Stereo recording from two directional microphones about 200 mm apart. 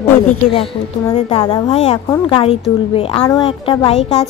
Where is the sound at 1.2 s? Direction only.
25° left (ahead or behind).